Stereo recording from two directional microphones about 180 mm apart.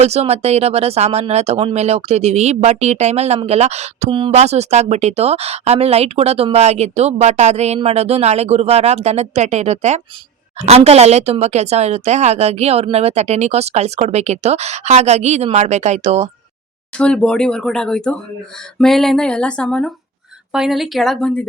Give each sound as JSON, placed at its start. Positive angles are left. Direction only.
{"t": 0.0, "sound": "speech", "side_deg": -35}
{"t": 17.0, "sound": "speech", "side_deg": 5}